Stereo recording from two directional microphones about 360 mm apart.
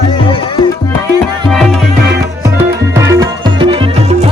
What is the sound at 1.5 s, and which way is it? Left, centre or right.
Music, centre.